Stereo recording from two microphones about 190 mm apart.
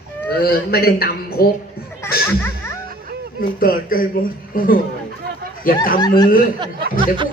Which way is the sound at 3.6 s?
50° left (ahead or behind).